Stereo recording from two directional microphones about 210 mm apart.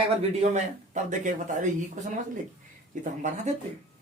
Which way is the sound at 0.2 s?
30° right (ahead or behind).